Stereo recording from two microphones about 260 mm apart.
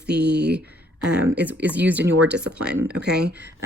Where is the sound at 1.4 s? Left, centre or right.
Centre.